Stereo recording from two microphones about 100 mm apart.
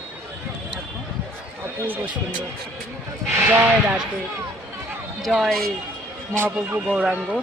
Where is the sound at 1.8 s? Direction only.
20° right (ahead or behind).